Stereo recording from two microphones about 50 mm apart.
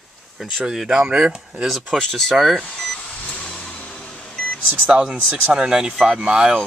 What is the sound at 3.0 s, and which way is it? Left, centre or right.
Microwave oven, left.